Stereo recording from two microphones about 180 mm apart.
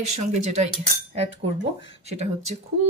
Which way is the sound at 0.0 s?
40° right (ahead or behind).